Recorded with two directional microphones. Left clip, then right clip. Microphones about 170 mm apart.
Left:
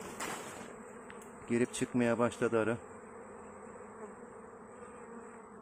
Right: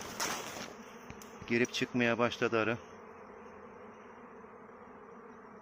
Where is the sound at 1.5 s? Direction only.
20° left (ahead or behind).